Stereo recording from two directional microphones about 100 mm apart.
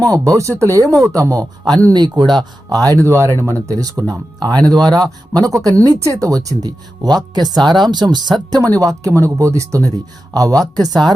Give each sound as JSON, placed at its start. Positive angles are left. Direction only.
{"t": 0.0, "sound": "speech", "side_deg": -35}